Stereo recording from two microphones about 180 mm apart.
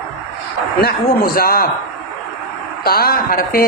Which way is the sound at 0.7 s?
60° left (ahead or behind).